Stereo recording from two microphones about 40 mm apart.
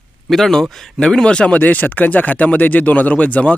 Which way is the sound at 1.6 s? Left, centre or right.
Left.